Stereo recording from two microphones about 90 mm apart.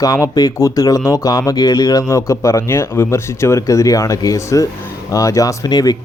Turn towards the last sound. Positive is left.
turn(degrees=45)  # may be behind; listen again after turning